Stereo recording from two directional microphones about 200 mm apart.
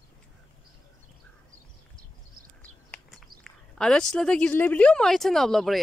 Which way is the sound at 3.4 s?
5° left (ahead or behind).